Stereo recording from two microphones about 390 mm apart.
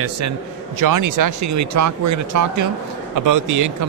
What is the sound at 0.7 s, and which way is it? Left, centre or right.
A man's voice, right.